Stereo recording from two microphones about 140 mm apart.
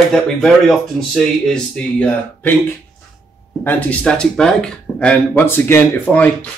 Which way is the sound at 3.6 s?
10° left (ahead or behind).